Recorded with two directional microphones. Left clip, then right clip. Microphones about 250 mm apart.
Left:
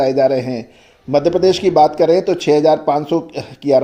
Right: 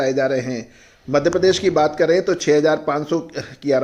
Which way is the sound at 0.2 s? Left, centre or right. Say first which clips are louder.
Left 5 dB; left.